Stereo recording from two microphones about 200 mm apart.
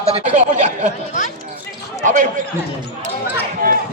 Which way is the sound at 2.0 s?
40° right (ahead or behind).